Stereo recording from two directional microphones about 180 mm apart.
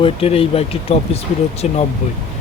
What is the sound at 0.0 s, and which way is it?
Speech, 30° left (ahead or behind).